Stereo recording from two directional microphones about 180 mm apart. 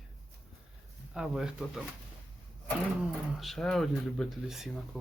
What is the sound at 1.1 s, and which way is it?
Speech, 5° right (ahead or behind).